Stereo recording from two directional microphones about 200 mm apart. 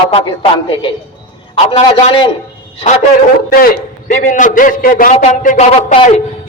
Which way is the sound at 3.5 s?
45° left (ahead or behind).